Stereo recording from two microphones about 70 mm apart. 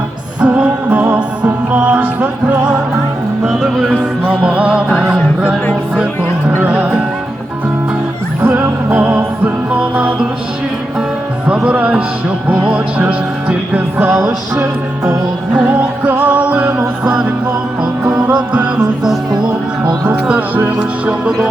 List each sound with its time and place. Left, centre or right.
0.4 s music: right
3.6 s music: centre
4.3 s music: centre
6.7 s music: centre
8.4 s music: right
11.5 s music: centre
14.2 s music: right
15.5 s music: centre
18.5 s music: centre
20.6 s music: right